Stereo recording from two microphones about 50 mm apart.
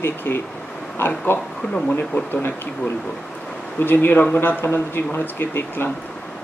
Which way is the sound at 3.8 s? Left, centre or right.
Left.